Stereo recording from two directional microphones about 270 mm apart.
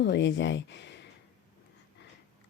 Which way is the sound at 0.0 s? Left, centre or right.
Left.